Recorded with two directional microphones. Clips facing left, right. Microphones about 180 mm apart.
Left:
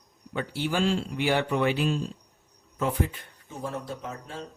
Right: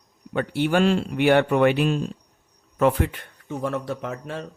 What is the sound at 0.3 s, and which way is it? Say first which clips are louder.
Speech: right 7 dB; 60° right (ahead or behind).